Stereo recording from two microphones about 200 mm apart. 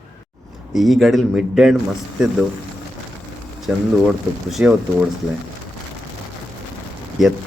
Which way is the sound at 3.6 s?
Centre (ahead or behind).